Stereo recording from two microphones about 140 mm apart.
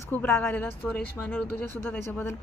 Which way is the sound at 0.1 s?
15° left (ahead or behind).